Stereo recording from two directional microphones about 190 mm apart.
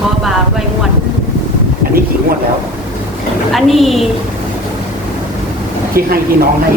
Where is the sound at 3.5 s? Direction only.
Centre (ahead or behind).